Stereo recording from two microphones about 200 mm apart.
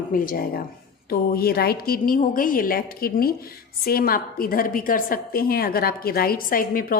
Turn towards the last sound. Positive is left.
turn(degrees=45)  # may be behind; listen again after turning